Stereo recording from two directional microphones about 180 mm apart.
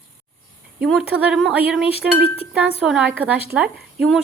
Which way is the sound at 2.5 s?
5° right (ahead or behind).